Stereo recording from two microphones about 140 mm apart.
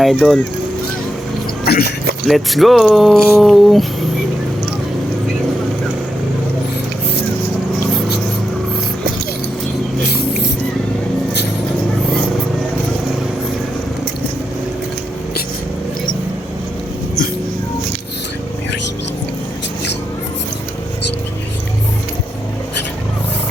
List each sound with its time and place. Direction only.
0.0 s speech: centre (ahead or behind)
1.6 s speech: 90° left
2.2 s speech: centre (ahead or behind)